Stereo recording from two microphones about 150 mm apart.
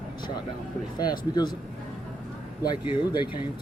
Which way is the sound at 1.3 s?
30° left (ahead or behind).